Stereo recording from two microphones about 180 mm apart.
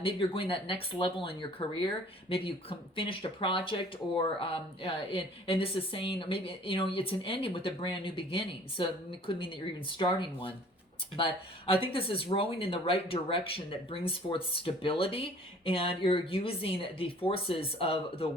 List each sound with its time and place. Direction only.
0.0 s speech: 30° left (ahead or behind)